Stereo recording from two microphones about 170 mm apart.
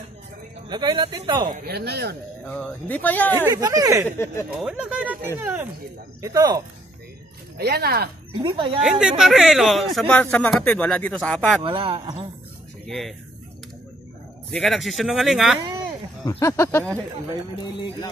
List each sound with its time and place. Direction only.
0.7 s speech: 25° right (ahead or behind)
1.7 s speech: 75° right (ahead or behind)
2.4 s speech: 10° left (ahead or behind)
3.3 s speech: 15° right (ahead or behind)
4.6 s speech: 5° right (ahead or behind)
7.5 s speech: 70° right (ahead or behind)
8.4 s speech: 25° right (ahead or behind)
8.8 s speech: 5° right (ahead or behind)
11.6 s speech: 30° right (ahead or behind)
12.8 s speech: centre (ahead or behind)
14.5 s speech: centre (ahead or behind)
16.3 s speech: 15° left (ahead or behind)